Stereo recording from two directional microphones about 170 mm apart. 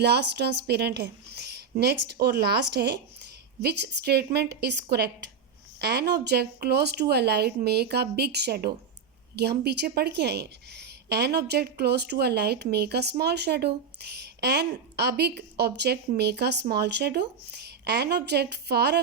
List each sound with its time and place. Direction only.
0.0 s a woman's voice: 75° right (ahead or behind)